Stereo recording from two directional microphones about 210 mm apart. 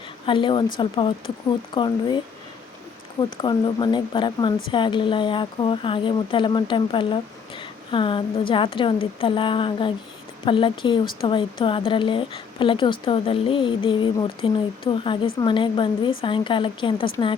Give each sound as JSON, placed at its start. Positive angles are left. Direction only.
{"t": 0.3, "sound": "speech", "side_deg": 25}
{"t": 3.4, "sound": "speech", "side_deg": 20}